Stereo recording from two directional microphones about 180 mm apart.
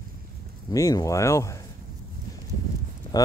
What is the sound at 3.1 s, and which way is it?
Speech, 20° left (ahead or behind).